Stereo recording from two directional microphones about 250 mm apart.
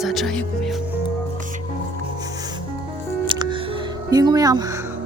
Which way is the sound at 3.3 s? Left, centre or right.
Centre.